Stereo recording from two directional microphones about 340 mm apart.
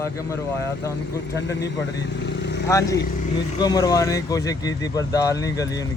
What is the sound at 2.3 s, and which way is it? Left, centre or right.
Vehicle, left.